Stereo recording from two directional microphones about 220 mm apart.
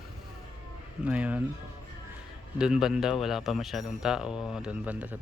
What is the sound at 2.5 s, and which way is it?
Speech, 5° right (ahead or behind).